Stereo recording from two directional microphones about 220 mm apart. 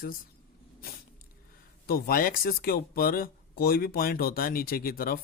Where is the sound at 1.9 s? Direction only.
40° left (ahead or behind).